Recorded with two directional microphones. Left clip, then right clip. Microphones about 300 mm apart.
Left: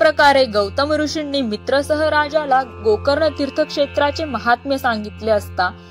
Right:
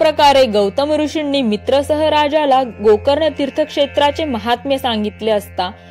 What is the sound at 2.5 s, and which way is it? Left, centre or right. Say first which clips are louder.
Speech: right 4 dB; centre.